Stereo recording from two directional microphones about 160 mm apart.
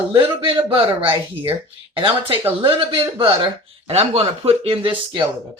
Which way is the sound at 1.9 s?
30° right (ahead or behind).